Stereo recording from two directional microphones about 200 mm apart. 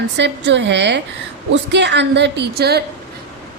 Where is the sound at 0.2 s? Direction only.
60° right (ahead or behind).